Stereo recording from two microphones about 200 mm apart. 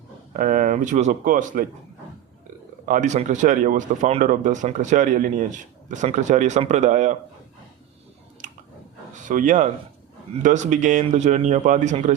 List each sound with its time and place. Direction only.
0.3 s speech: 40° right (ahead or behind)
2.8 s speech: 40° right (ahead or behind)
8.4 s a sound: 40° right (ahead or behind)
9.1 s speech: 40° right (ahead or behind)